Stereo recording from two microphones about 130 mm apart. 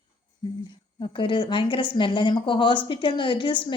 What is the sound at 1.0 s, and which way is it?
A woman's voice, 40° left (ahead or behind).